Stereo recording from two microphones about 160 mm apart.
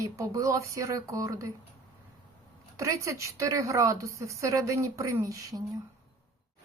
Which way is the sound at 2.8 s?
20° right (ahead or behind).